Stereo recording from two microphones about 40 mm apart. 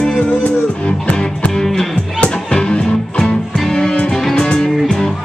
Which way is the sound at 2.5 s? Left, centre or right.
Left.